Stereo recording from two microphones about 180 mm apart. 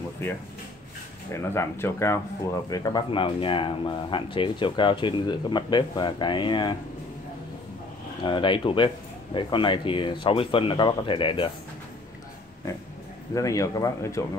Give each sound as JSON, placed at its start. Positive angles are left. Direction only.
{"t": 1.3, "sound": "speech", "side_deg": 15}
{"t": 8.2, "sound": "speech", "side_deg": 25}
{"t": 13.3, "sound": "speech", "side_deg": 20}